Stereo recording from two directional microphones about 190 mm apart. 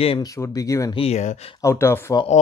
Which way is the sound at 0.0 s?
30° left (ahead or behind).